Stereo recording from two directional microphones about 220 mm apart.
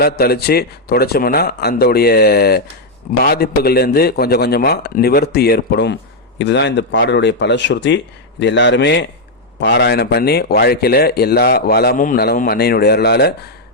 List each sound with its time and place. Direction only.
0.0 s a man's voice: 45° left (ahead or behind)